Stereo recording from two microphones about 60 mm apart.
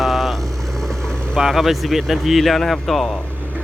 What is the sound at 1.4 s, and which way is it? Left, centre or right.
Speech, centre.